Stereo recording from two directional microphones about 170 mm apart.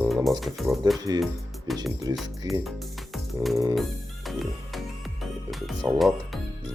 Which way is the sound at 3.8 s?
Centre (ahead or behind).